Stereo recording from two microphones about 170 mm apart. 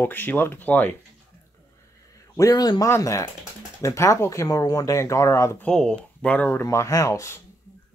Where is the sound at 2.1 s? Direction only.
20° left (ahead or behind).